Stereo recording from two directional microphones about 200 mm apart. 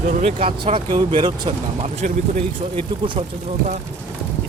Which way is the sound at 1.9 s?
40° right (ahead or behind).